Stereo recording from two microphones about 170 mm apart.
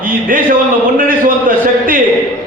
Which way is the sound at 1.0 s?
55° right (ahead or behind).